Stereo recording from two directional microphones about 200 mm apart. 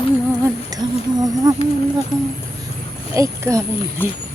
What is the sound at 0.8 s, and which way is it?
Speech, 25° right (ahead or behind).